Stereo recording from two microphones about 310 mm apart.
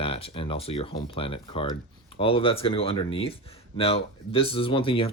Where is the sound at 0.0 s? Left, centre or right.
Centre.